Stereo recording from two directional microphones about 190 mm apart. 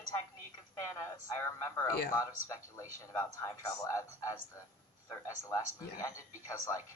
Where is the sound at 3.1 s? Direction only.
15° left (ahead or behind).